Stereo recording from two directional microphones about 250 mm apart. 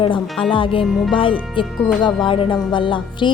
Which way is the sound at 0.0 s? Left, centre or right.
Left.